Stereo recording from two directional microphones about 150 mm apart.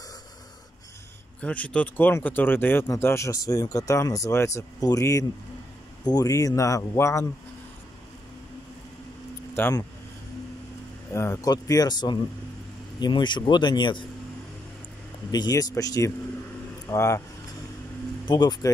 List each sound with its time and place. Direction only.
1.4 s speech: 10° left (ahead or behind)
9.6 s speech: 15° left (ahead or behind)
11.1 s speech: 20° left (ahead or behind)
15.3 s speech: 25° left (ahead or behind)
18.2 s speech: 30° left (ahead or behind)